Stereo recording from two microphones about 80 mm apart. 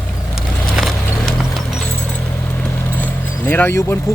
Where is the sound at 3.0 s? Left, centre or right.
Left.